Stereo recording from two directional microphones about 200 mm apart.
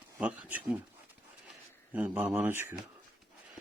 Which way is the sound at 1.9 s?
5° right (ahead or behind).